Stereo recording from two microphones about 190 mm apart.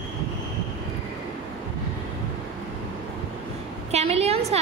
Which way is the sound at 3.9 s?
35° right (ahead or behind).